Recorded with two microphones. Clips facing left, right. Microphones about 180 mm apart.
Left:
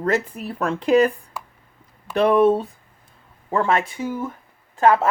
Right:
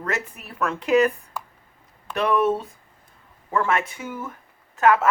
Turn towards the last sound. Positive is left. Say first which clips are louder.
# left 2 dB
turn(degrees=30)  # may be behind; listen again after turning